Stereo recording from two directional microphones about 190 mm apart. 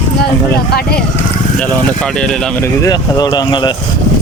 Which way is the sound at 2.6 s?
20° left (ahead or behind).